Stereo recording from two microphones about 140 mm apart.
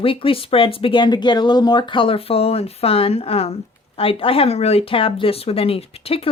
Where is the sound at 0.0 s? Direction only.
40° left (ahead or behind).